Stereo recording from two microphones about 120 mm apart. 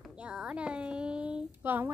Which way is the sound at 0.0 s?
10° right (ahead or behind).